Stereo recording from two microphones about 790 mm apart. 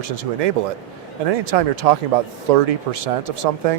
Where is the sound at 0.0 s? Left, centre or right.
Right.